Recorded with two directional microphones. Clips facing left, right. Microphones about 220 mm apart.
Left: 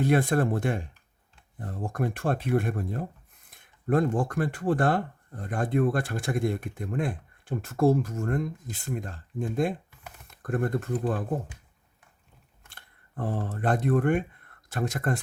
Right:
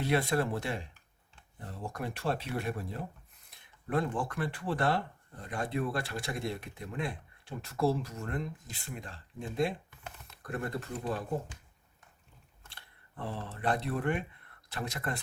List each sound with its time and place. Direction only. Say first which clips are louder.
0.0 s speech: left 6 dB; 50° left (ahead or behind)
12.6 s speech: left 1 dB; 50° left (ahead or behind)